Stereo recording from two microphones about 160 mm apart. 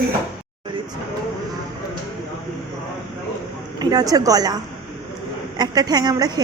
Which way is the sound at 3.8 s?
25° right (ahead or behind).